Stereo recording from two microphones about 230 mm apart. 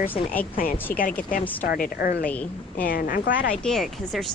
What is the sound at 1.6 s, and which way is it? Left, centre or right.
A woman's voice, left.